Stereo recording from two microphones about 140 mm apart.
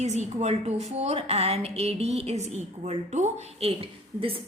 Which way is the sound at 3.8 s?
40° right (ahead or behind).